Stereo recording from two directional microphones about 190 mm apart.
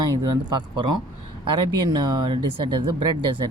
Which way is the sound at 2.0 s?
25° right (ahead or behind).